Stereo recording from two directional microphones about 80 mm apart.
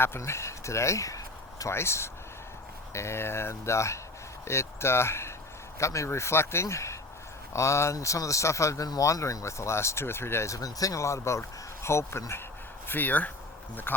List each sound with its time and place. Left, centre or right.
0.0 s speech: left
1.7 s speech: left
12.9 s speech: left